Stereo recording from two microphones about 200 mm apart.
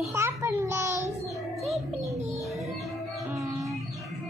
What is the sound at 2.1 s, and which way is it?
Bird, 35° right (ahead or behind).